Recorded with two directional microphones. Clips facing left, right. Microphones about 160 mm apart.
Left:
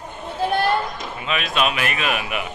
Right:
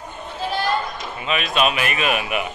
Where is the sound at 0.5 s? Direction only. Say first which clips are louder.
Left 2 dB; 55° left (ahead or behind).